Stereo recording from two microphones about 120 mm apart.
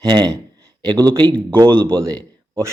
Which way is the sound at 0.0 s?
40° right (ahead or behind).